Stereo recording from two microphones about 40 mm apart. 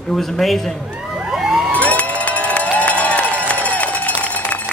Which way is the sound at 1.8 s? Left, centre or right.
Left.